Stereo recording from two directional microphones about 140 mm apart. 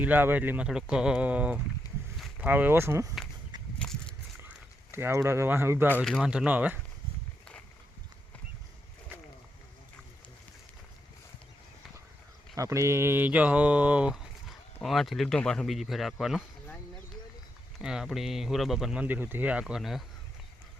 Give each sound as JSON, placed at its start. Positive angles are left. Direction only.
{"t": 0.0, "sound": "speech", "side_deg": -15}
{"t": 2.1, "sound": "boat", "side_deg": 0}
{"t": 2.5, "sound": "speech", "side_deg": -15}
{"t": 3.8, "sound": "a sound", "side_deg": 5}
{"t": 4.4, "sound": "a sound", "side_deg": -15}
{"t": 6.0, "sound": "speech", "side_deg": 0}
{"t": 12.5, "sound": "speech", "side_deg": -20}
{"t": 17.7, "sound": "speech", "side_deg": -5}